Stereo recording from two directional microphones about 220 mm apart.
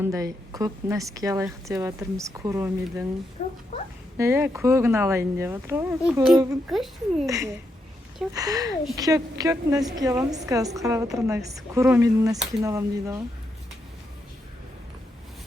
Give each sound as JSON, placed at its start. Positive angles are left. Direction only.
{"t": 0.0, "sound": "a woman's voice", "side_deg": -15}
{"t": 3.4, "sound": "a sound", "side_deg": 35}
{"t": 4.2, "sound": "a woman's voice", "side_deg": -10}
{"t": 7.3, "sound": "a woman's voice", "side_deg": -15}